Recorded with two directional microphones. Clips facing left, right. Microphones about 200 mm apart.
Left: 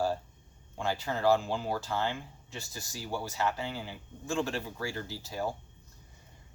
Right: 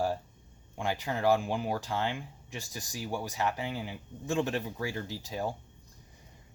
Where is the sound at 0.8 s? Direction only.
15° right (ahead or behind).